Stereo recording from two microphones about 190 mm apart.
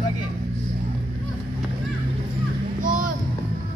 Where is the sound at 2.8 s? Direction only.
45° right (ahead or behind).